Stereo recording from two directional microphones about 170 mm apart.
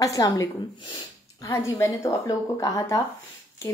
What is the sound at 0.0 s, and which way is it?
A woman's voice, 20° left (ahead or behind).